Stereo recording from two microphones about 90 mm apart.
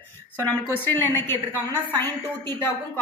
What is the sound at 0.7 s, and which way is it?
Speech, 25° left (ahead or behind).